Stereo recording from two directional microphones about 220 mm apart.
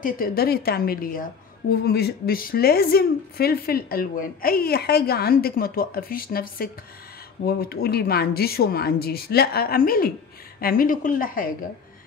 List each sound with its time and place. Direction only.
0.0 s a woman's voice: 40° left (ahead or behind)